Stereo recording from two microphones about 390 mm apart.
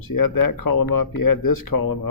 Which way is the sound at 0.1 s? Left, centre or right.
Left.